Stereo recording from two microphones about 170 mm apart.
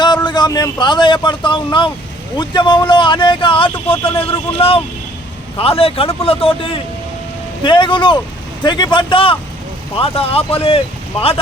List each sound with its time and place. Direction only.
0.3 s speech: 25° left (ahead or behind)